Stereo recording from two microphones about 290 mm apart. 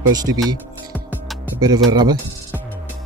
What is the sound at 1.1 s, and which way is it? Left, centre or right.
Music, centre.